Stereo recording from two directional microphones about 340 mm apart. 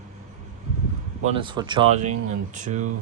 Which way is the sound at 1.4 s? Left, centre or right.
Centre.